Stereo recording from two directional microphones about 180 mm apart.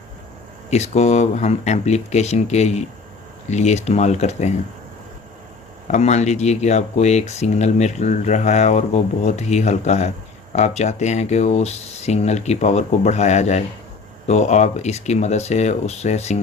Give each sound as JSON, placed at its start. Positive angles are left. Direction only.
{"t": 0.7, "sound": "speech", "side_deg": 35}
{"t": 5.9, "sound": "speech", "side_deg": 40}